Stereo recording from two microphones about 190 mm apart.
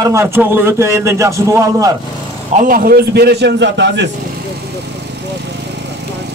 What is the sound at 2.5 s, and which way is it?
Speech, 45° right (ahead or behind).